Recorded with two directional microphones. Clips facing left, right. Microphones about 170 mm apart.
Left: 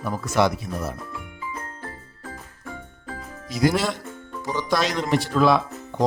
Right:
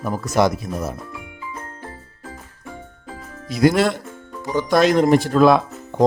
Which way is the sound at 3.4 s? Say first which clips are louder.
Right 5 dB; 60° right (ahead or behind).